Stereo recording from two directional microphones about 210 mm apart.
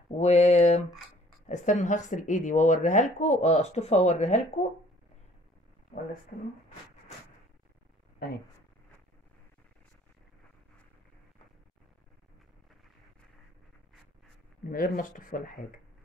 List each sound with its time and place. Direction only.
0.2 s speech: 30° left (ahead or behind)
5.9 s speech: 25° left (ahead or behind)
6.3 s speech: 35° left (ahead or behind)
14.7 s speech: 40° left (ahead or behind)